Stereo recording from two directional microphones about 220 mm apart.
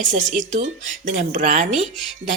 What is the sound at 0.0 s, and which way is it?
Speech, 35° right (ahead or behind).